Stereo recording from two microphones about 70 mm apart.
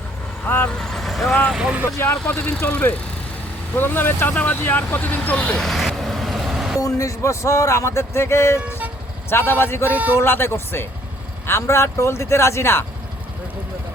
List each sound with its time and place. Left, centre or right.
0.4 s speech: left
0.8 s speech: centre
1.5 s speech: centre
2.0 s speech: left
5.6 s vehicle: centre
6.7 s speech: left
9.9 s speech: right
10.2 s speech: left